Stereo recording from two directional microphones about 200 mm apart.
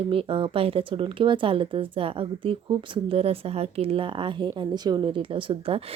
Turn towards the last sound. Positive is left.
turn(degrees=-25)  # may be behind; listen again after turning